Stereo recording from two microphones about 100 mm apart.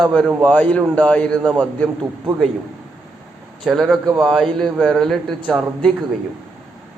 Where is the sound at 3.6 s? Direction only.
5° left (ahead or behind).